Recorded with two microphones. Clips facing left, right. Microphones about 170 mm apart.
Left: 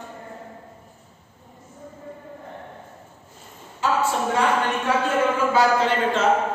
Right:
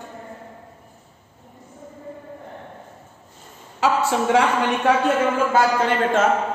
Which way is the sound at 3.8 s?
80° right.